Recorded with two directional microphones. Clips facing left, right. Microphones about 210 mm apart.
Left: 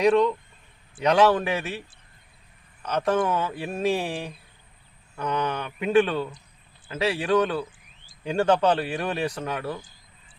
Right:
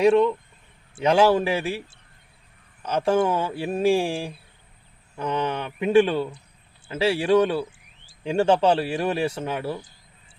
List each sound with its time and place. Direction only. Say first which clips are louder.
0.0 s speech: right 2 dB; 25° right (ahead or behind)
2.8 s speech: right 3 dB; 30° right (ahead or behind)